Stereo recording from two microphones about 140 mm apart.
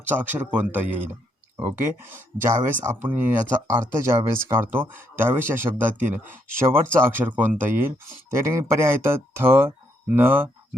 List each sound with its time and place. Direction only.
0.0 s speech: 15° right (ahead or behind)